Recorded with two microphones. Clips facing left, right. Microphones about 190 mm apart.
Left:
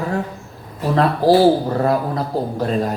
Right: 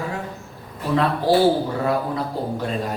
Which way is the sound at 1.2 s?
35° left (ahead or behind).